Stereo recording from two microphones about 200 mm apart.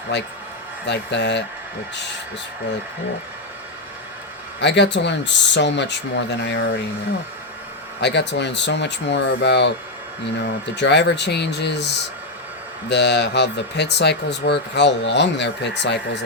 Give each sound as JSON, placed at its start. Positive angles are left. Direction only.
{"t": 0.1, "sound": "speech", "side_deg": 60}
{"t": 4.6, "sound": "speech", "side_deg": 60}
{"t": 8.0, "sound": "speech", "side_deg": 60}
{"t": 10.8, "sound": "speech", "side_deg": 60}
{"t": 12.9, "sound": "speech", "side_deg": 60}